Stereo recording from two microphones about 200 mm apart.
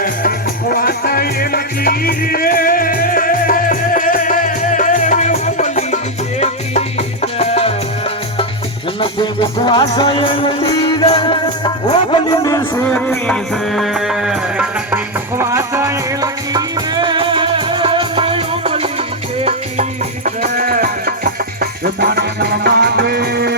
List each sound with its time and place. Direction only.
0.0 s music: 45° left (ahead or behind); by 7.7 s 30° left (ahead or behind)
9.0 s music: 25° left (ahead or behind); by 23.6 s 55° right (ahead or behind)